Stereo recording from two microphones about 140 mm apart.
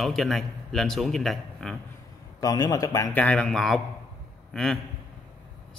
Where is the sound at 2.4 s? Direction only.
25° left (ahead or behind).